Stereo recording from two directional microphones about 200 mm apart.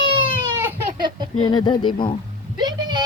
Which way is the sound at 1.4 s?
20° left (ahead or behind).